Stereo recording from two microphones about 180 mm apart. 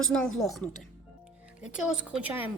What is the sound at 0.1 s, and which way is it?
Speech, 5° left (ahead or behind).